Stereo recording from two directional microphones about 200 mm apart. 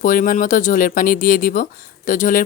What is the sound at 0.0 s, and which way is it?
Speech, 45° left (ahead or behind).